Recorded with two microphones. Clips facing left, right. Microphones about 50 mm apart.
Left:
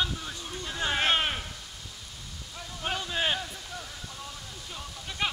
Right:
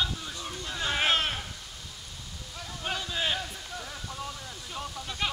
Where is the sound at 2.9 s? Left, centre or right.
Centre.